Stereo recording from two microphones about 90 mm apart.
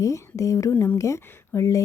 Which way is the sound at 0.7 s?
20° left (ahead or behind).